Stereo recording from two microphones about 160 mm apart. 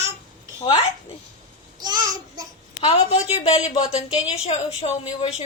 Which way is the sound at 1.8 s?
25° right (ahead or behind).